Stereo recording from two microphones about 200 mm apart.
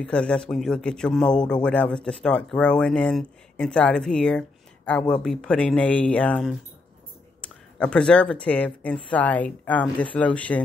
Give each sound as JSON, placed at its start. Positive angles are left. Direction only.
{"t": 0.0, "sound": "speech", "side_deg": 5}